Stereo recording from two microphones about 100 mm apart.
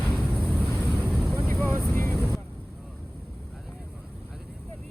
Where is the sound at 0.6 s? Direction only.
10° left (ahead or behind).